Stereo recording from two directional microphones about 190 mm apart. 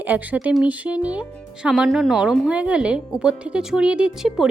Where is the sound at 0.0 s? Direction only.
10° right (ahead or behind).